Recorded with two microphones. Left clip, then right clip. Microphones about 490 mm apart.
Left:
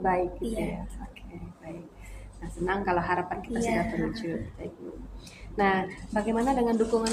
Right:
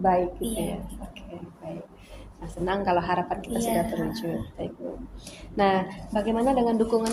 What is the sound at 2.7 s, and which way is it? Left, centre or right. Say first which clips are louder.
Speech: right 3 dB; right.